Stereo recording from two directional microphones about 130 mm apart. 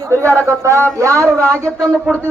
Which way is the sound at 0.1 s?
20° right (ahead or behind).